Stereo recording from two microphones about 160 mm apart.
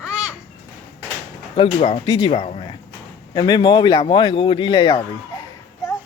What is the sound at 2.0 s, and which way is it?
Speech, 30° left (ahead or behind).